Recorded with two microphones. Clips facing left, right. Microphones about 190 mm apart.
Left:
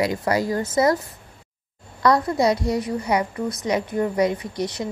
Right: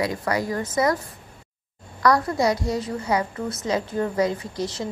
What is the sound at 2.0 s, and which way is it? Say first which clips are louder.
A woman's voice: left 1 dB; 25° left (ahead or behind).